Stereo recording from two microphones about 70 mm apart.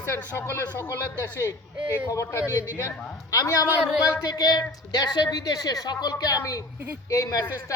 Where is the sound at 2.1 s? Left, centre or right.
Left.